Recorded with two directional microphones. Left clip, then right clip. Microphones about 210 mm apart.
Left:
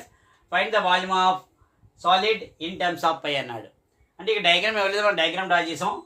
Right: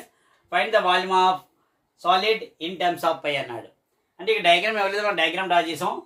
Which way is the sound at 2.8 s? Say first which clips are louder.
Right 1 dB; 20° left (ahead or behind).